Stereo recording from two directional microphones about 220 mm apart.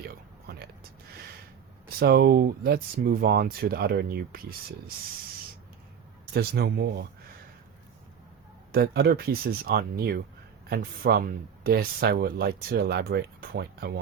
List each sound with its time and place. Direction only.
0.1 s a sound: 45° right (ahead or behind)
2.0 s speech: 45° right (ahead or behind)
6.3 s speech: 45° right (ahead or behind)
8.7 s speech: 45° right (ahead or behind)